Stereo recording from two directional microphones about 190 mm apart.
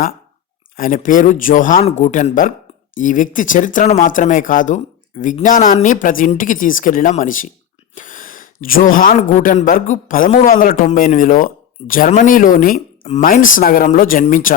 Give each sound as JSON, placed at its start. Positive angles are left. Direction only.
{"t": 0.8, "sound": "a man's voice", "side_deg": 45}
{"t": 7.9, "sound": "a sound", "side_deg": 45}
{"t": 9.3, "sound": "a man's voice", "side_deg": 40}